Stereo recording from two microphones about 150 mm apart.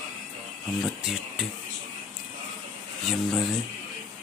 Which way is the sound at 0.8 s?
Centre (ahead or behind).